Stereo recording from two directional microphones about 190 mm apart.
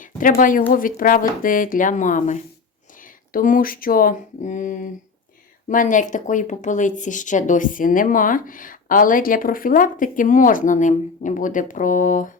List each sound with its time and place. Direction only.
0.0 s a woman's voice: 45° left (ahead or behind)